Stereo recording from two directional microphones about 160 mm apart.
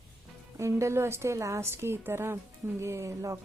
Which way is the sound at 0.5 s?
20° right (ahead or behind).